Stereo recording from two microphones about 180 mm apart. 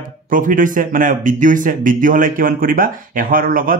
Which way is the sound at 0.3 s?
50° right (ahead or behind).